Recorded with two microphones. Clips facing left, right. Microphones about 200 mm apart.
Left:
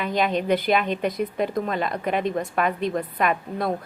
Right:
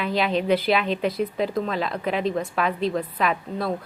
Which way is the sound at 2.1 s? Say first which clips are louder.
Right 1 dB; 50° left (ahead or behind).